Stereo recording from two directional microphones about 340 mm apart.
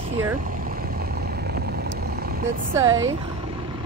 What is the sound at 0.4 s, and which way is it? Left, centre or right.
Vehicle, right.